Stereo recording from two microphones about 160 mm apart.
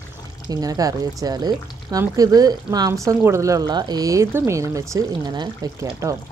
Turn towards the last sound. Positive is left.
turn(degrees=-20)  # may be behind; listen again after turning